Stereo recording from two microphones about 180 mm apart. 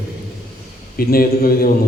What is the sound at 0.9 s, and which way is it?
Speech, 55° left (ahead or behind).